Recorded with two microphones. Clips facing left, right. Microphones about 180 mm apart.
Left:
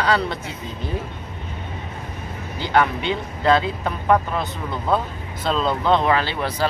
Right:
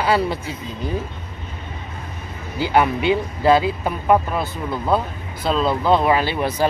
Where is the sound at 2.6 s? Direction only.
10° right (ahead or behind).